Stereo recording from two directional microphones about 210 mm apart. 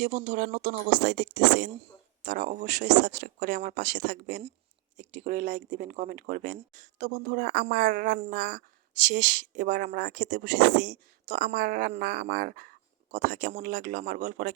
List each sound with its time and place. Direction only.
0.0 s speech: 35° right (ahead or behind)
2.2 s speech: 35° right (ahead or behind)
9.0 s speech: 40° right (ahead or behind)
9.7 s speech: 55° right (ahead or behind)
10.4 s speech: 35° right (ahead or behind)